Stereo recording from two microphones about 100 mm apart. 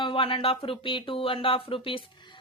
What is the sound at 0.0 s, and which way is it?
Speech, 65° left (ahead or behind).